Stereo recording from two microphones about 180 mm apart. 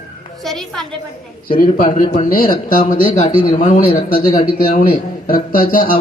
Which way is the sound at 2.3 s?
50° left (ahead or behind).